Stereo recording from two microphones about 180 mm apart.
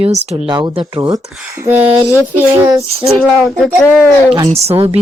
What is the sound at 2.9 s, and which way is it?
Speech, 35° right (ahead or behind).